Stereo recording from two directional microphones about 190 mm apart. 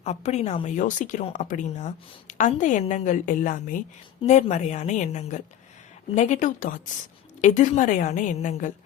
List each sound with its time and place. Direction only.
0.0 s a woman's voice: 35° left (ahead or behind)